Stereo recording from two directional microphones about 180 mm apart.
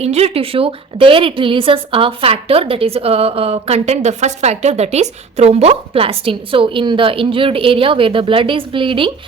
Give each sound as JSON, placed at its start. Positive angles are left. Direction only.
{"t": 0.0, "sound": "a woman's voice", "side_deg": -35}